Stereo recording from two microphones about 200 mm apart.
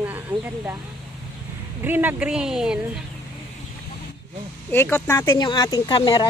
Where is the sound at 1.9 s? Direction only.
10° right (ahead or behind).